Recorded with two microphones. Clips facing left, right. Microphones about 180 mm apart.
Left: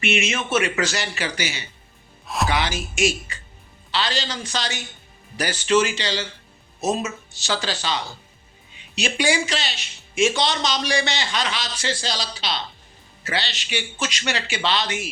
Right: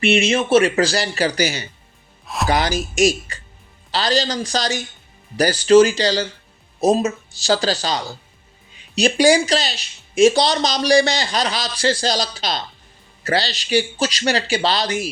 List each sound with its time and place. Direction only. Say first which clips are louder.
0.0 s speech: right 7 dB; 35° right (ahead or behind)
2.2 s music: even; centre (ahead or behind)
2.5 s speech: right 5 dB; 40° right (ahead or behind)